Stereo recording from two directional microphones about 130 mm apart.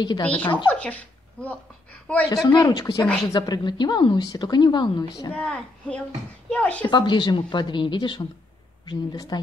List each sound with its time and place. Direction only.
0.0 s speech: 35° left (ahead or behind)
0.7 s speech: 10° left (ahead or behind)
2.2 s speech: 30° left (ahead or behind)
5.3 s a woman's voice: 10° left (ahead or behind)
6.9 s speech: 35° left (ahead or behind)